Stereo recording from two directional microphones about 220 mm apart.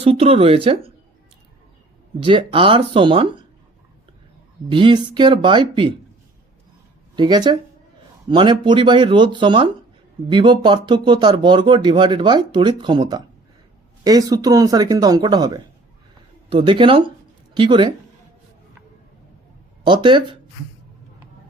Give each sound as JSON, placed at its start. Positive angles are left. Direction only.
{"t": 0.0, "sound": "speech", "side_deg": -25}
{"t": 2.2, "sound": "speech", "side_deg": -25}
{"t": 4.7, "sound": "speech", "side_deg": -20}
{"t": 7.2, "sound": "speech", "side_deg": -20}
{"t": 19.8, "sound": "speech", "side_deg": -20}